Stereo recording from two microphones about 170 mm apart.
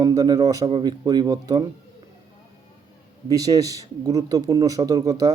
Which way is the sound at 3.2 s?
20° right (ahead or behind).